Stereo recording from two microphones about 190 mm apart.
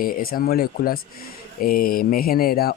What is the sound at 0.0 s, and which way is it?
Speech, 50° left (ahead or behind).